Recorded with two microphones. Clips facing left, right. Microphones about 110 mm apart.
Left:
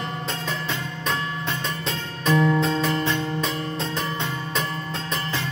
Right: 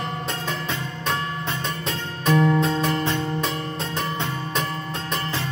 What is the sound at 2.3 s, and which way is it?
Music, 20° right (ahead or behind).